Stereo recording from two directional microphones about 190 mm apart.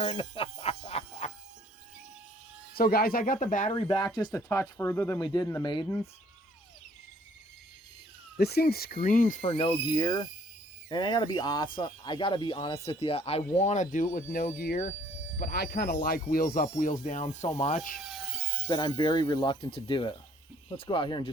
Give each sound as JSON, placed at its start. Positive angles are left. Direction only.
{"t": 0.0, "sound": "a sound", "side_deg": 30}
{"t": 2.7, "sound": "speech", "side_deg": 50}
{"t": 3.7, "sound": "speech", "side_deg": 25}
{"t": 4.4, "sound": "speech", "side_deg": 15}
{"t": 8.4, "sound": "speech", "side_deg": 55}
{"t": 9.4, "sound": "speech", "side_deg": 30}
{"t": 17.9, "sound": "a sound", "side_deg": 0}
{"t": 18.7, "sound": "speech", "side_deg": 25}